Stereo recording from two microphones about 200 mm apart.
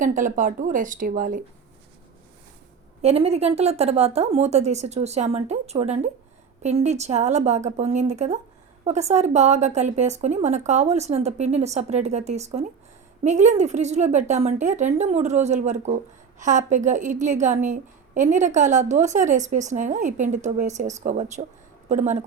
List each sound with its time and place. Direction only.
0.0 s a woman's voice: 40° right (ahead or behind)
3.0 s a woman's voice: 30° right (ahead or behind)